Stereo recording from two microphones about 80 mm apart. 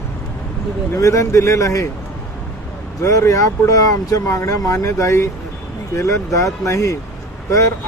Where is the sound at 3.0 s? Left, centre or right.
Left.